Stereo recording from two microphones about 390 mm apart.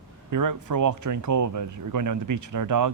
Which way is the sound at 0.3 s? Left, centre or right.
Right.